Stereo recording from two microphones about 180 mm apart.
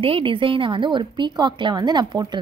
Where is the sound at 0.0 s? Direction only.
30° right (ahead or behind).